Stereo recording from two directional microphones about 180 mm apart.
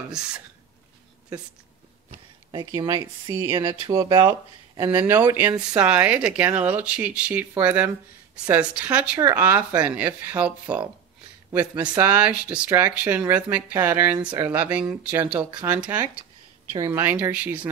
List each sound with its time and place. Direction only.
2.5 s speech: 20° right (ahead or behind)